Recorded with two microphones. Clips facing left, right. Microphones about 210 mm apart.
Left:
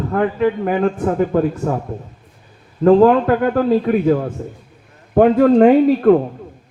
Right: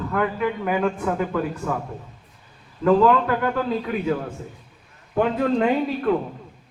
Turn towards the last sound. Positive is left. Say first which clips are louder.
# left 11 dB
turn(degrees=50)  # may be behind; listen again after turning